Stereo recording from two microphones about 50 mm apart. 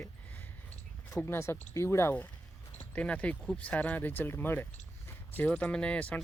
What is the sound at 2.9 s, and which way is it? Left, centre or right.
Speech, left.